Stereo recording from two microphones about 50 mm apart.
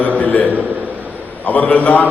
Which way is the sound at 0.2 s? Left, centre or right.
Left.